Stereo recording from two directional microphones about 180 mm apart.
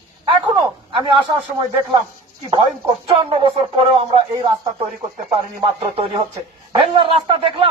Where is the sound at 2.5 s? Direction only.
30° right (ahead or behind).